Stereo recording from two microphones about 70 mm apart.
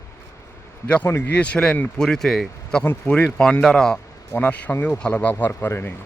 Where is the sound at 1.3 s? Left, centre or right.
Centre.